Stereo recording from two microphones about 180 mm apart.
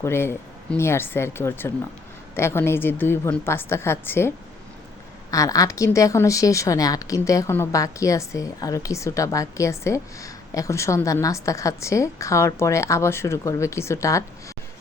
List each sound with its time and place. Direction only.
0.0 s a woman's voice: 15° left (ahead or behind)
5.3 s a woman's voice: 20° left (ahead or behind)